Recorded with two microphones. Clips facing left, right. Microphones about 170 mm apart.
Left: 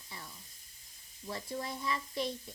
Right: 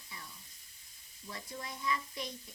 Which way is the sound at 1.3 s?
30° left (ahead or behind).